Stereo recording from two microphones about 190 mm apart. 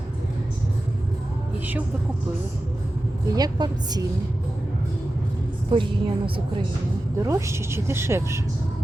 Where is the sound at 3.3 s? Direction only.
20° right (ahead or behind).